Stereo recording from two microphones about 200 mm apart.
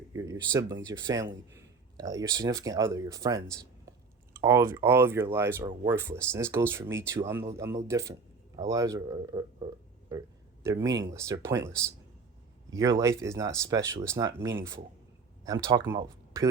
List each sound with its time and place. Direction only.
0.1 s a sound: 15° right (ahead or behind)
0.5 s speech: 20° right (ahead or behind)
13.2 s speech: 15° right (ahead or behind)